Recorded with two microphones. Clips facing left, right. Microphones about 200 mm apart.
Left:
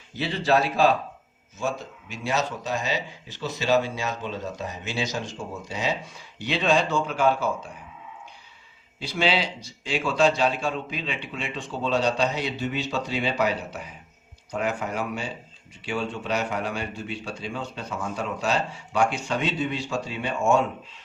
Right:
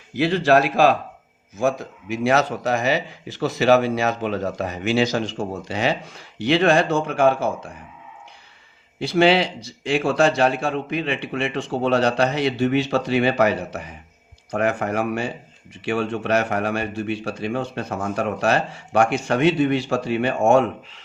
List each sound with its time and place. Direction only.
0.1 s speech: 90° right
2.1 s speech: 80° right; by 7.3 s 55° right (ahead or behind)
9.0 s speech: 65° right (ahead or behind)